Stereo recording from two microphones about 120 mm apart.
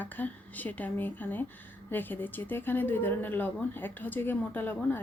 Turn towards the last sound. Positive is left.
turn(degrees=15)  # may be behind; listen again after turning